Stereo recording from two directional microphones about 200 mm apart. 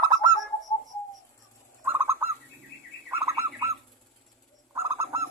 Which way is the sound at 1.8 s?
10° right (ahead or behind).